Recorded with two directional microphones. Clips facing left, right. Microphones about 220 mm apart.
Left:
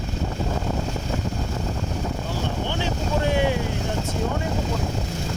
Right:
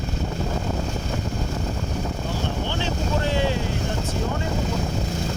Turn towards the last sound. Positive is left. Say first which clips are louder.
# left 2 dB
turn(degrees=15)  # may be behind; listen again after turning